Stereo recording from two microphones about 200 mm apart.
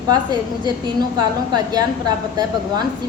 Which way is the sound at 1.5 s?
20° right (ahead or behind).